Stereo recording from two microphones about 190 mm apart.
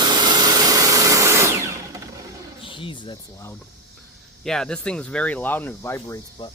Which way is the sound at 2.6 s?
25° left (ahead or behind).